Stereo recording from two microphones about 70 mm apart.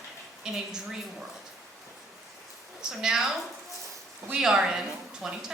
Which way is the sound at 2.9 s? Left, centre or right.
Centre.